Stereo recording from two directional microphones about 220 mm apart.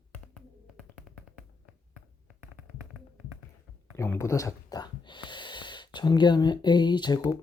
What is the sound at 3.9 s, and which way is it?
Snort, 10° left (ahead or behind).